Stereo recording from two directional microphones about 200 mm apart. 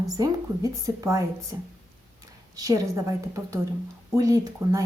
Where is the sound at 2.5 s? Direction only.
15° right (ahead or behind).